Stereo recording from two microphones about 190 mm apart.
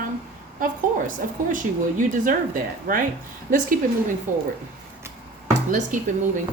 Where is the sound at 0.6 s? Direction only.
45° right (ahead or behind).